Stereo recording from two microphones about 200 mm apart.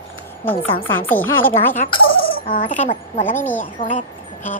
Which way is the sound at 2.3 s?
40° left (ahead or behind).